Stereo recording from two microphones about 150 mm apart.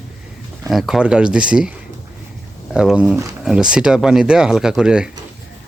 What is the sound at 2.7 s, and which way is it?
Speech, 5° right (ahead or behind).